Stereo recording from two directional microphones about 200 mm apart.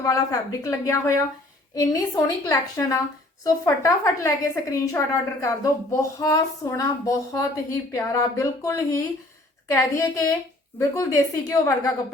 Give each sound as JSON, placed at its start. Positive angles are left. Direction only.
{"t": 0.0, "sound": "a woman's voice", "side_deg": 15}